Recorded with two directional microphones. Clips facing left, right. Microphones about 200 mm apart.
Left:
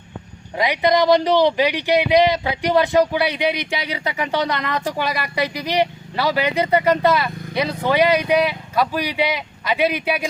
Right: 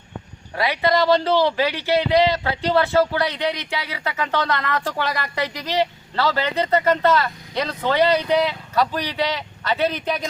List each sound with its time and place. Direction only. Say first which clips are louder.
0.5 s speech: left 2 dB; 15° left (ahead or behind)